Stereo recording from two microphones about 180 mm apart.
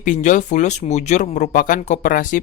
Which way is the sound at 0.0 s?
45° left (ahead or behind).